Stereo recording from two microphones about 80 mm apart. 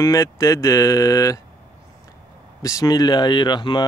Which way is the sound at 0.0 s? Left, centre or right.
Left.